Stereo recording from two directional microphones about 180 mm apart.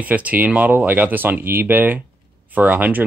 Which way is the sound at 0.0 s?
10° right (ahead or behind).